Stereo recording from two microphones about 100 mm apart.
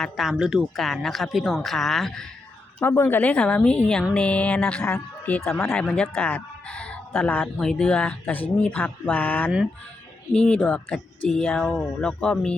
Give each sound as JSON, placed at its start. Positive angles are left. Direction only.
{"t": 0.0, "sound": "speech", "side_deg": -5}
{"t": 2.8, "sound": "speech", "side_deg": 20}
{"t": 5.8, "sound": "speech", "side_deg": 10}